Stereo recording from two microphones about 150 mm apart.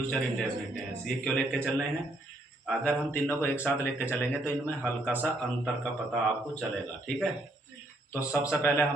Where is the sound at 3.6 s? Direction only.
15° left (ahead or behind).